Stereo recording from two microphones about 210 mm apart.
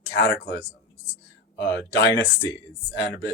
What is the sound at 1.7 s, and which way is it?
Speech, 50° left (ahead or behind).